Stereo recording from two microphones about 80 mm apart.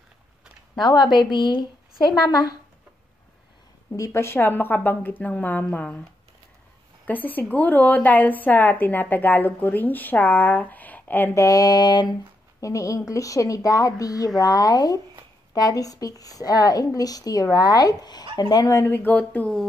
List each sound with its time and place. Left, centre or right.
0.7 s a woman's voice: left
3.9 s a woman's voice: left; by 6.0 s centre
7.1 s a woman's voice: left
11.3 s speech: left
18.7 s speech: left
19.0 s a woman's voice: left